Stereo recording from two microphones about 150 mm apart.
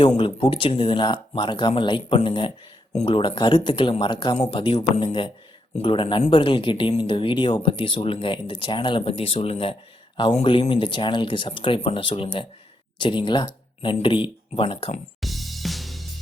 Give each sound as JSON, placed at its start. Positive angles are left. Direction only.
{"t": 0.2, "sound": "speech", "side_deg": 35}
{"t": 15.2, "sound": "music", "side_deg": 0}